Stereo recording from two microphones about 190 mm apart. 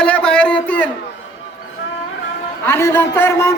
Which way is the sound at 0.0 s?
5° left (ahead or behind).